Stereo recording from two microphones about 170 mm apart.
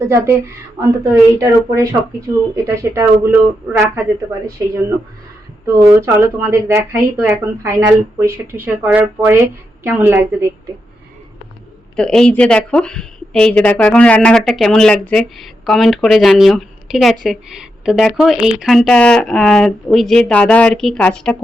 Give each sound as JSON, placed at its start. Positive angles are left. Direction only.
{"t": 0.1, "sound": "speech", "side_deg": -15}
{"t": 11.9, "sound": "a woman's voice", "side_deg": 5}